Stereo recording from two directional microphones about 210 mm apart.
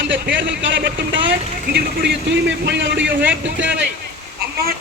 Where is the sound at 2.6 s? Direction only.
55° right (ahead or behind).